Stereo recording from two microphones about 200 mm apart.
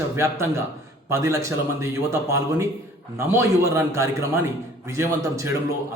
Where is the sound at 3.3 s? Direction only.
15° right (ahead or behind).